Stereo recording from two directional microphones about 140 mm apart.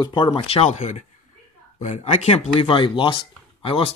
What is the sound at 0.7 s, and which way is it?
Speech, 55° left (ahead or behind).